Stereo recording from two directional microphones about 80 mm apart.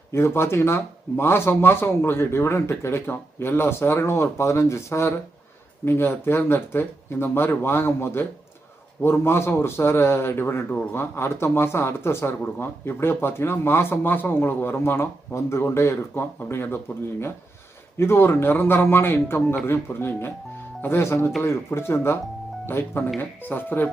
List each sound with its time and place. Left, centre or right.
0.1 s a man's voice: left